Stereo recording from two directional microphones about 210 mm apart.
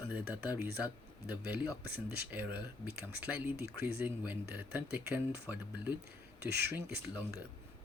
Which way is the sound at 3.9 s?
10° right (ahead or behind).